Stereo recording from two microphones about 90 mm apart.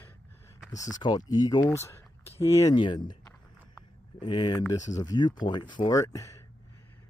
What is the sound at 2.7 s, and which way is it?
Speech, 60° left (ahead or behind).